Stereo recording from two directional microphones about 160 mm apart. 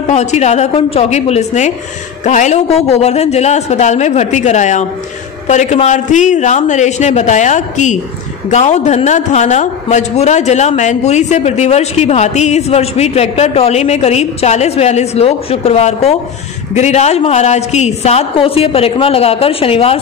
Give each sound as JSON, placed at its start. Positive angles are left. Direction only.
{"t": 0.1, "sound": "a man's voice", "side_deg": 45}